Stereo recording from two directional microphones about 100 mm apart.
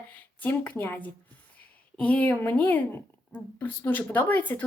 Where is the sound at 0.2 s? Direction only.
20° left (ahead or behind).